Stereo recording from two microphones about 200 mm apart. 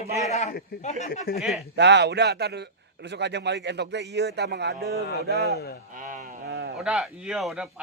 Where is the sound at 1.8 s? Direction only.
60° right (ahead or behind).